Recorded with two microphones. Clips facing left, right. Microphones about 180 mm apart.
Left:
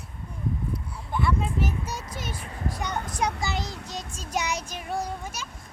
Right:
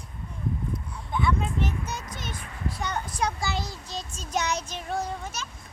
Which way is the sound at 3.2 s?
20° left (ahead or behind).